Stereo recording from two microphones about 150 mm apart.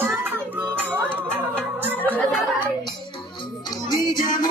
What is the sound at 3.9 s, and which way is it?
Music, 30° left (ahead or behind).